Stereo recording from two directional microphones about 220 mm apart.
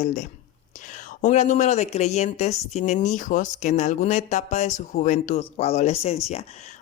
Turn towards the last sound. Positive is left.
turn(degrees=30)  # may be behind; listen again after turning